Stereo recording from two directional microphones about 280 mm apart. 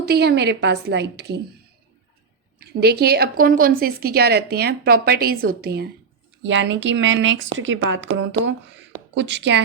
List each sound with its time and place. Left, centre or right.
0.0 s speech: right
2.6 s speech: right